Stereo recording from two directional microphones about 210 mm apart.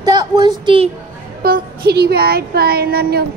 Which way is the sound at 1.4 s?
45° right (ahead or behind).